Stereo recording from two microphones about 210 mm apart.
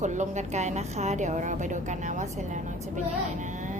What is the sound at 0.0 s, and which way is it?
A woman's voice, 35° right (ahead or behind).